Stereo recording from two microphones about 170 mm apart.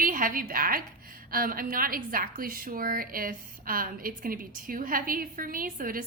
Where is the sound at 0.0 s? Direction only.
55° right (ahead or behind).